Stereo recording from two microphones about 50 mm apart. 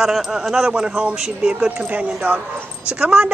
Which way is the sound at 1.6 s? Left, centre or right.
Right.